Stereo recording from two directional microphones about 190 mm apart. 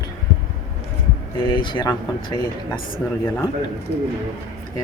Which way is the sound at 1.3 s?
25° left (ahead or behind).